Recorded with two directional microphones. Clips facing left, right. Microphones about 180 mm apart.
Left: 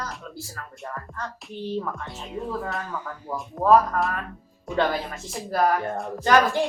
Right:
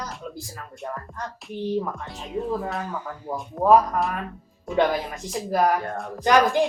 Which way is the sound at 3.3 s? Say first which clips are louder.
Right 1 dB; 15° right (ahead or behind).